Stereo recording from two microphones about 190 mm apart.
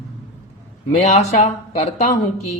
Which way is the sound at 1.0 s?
35° left (ahead or behind).